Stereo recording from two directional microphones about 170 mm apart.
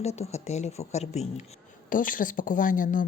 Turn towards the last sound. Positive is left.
turn(degrees=50)  # may be behind; listen again after turning